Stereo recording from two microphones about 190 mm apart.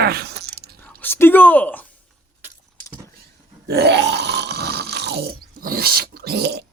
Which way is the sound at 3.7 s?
60° right (ahead or behind).